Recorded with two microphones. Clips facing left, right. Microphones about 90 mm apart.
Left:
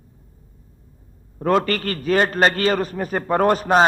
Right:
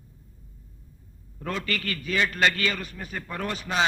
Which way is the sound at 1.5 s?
45° left (ahead or behind).